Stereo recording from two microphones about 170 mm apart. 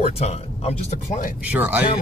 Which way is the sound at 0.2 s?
35° left (ahead or behind).